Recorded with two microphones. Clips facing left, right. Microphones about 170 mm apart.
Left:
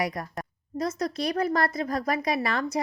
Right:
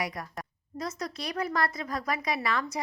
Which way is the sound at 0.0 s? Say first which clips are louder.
Left 5 dB; 45° left (ahead or behind).